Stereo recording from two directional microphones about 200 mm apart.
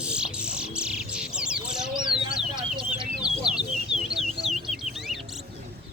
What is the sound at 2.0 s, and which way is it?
Bird, 25° right (ahead or behind).